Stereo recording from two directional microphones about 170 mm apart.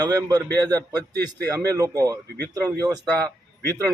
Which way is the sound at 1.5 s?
20° right (ahead or behind).